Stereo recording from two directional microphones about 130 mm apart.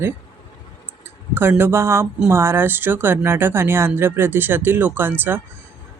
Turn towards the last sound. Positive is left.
turn(degrees=-15)  # may be behind; listen again after turning